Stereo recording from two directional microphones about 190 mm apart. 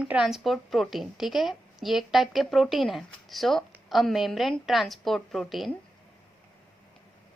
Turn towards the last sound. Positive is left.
turn(degrees=5)  # may be behind; listen again after turning